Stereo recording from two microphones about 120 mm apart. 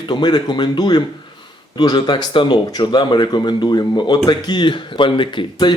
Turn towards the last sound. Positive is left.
turn(degrees=40)  # may be behind; listen again after turning